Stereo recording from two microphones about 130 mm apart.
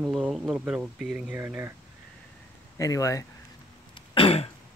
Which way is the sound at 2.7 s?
25° left (ahead or behind).